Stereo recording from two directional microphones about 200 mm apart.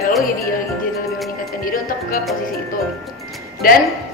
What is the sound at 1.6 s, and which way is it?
Speech, 45° left (ahead or behind).